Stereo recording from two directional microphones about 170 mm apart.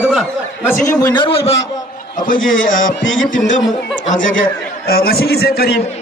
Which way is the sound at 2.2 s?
55° left (ahead or behind).